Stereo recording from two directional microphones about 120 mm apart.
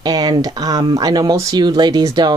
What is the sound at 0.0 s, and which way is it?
Speech, 35° right (ahead or behind).